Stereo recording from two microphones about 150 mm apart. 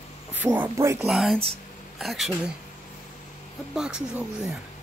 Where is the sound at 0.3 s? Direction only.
10° right (ahead or behind).